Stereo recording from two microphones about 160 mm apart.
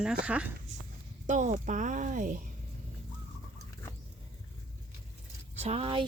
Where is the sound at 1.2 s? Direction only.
50° right (ahead or behind).